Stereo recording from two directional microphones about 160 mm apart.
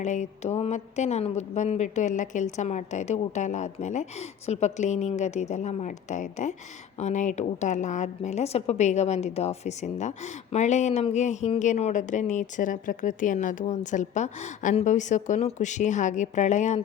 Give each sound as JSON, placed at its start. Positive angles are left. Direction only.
{"t": 0.0, "sound": "a woman's voice", "side_deg": 50}